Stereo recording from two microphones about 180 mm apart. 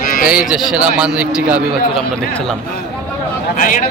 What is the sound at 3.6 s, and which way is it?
Speech, 50° left (ahead or behind).